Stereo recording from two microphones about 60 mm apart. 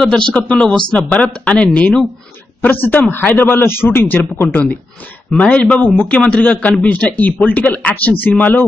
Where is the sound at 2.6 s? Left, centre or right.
Left.